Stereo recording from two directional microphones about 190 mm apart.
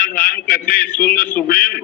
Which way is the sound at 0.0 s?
50° left (ahead or behind).